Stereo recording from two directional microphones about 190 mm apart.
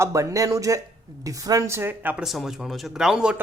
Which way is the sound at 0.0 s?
15° right (ahead or behind).